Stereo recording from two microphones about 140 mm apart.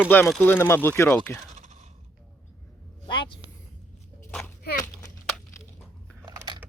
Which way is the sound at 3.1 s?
35° left (ahead or behind).